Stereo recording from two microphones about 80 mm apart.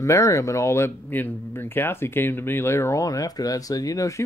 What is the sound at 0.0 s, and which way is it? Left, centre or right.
Speech, left.